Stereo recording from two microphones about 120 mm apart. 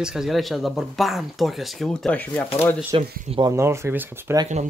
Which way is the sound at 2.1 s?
15° left (ahead or behind).